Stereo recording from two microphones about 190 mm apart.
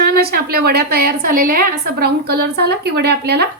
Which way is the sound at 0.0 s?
55° right (ahead or behind).